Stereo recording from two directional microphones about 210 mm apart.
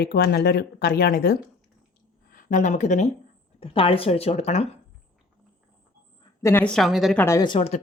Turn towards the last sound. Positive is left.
turn(degrees=25)  # may be behind; listen again after turning